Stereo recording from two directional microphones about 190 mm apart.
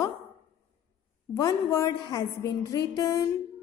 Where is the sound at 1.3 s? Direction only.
15° left (ahead or behind).